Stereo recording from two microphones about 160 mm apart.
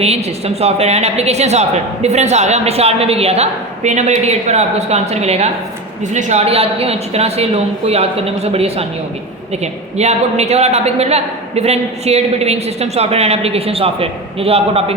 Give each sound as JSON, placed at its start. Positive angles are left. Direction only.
{"t": 0.0, "sound": "a woman's voice", "side_deg": -40}
{"t": 10.0, "sound": "a woman's voice", "side_deg": -45}